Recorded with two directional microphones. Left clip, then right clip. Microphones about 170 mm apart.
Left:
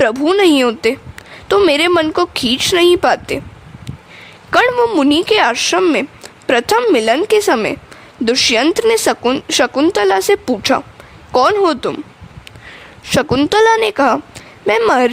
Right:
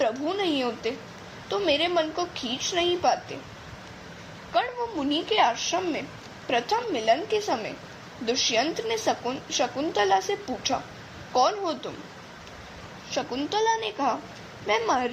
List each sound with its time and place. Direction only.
0.0 s speech: 65° left (ahead or behind)
4.5 s speech: 65° left (ahead or behind)
13.1 s speech: 70° left (ahead or behind)